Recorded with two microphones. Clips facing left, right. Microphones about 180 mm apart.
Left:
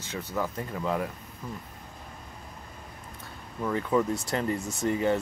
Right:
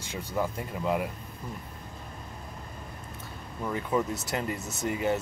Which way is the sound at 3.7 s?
20° right (ahead or behind).